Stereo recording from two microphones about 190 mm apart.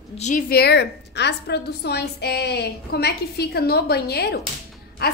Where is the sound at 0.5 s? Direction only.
60° left (ahead or behind).